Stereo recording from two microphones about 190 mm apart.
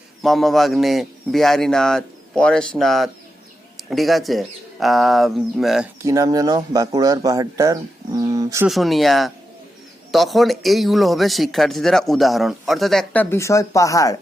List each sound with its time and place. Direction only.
0.2 s speech: centre (ahead or behind)
6.0 s speech: 15° right (ahead or behind)
8.6 s speech: centre (ahead or behind)
13.3 s speech: 15° left (ahead or behind)